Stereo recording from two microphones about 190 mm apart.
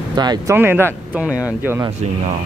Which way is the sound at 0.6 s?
10° right (ahead or behind).